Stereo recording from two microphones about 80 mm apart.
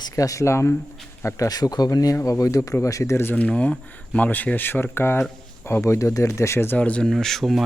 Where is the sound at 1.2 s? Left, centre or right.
Left.